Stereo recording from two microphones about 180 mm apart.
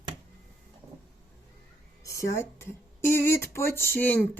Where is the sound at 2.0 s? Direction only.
15° left (ahead or behind).